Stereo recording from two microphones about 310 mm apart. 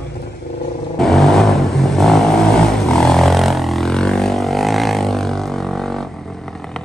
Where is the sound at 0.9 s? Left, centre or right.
Centre.